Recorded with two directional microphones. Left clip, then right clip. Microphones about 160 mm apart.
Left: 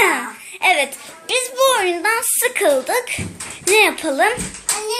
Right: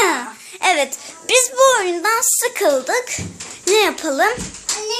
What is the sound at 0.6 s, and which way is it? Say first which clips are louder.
Speech: left 1 dB; 35° right (ahead or behind).